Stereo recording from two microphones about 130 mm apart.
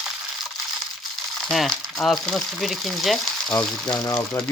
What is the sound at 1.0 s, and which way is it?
Speech, centre (ahead or behind).